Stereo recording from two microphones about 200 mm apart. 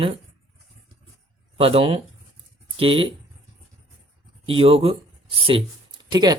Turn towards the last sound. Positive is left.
turn(degrees=-20)  # may be behind; listen again after turning